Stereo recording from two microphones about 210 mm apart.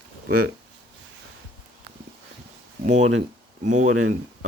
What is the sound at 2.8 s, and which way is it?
Speech, 30° right (ahead or behind).